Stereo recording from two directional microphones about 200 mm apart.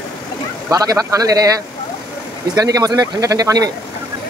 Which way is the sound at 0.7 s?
15° right (ahead or behind).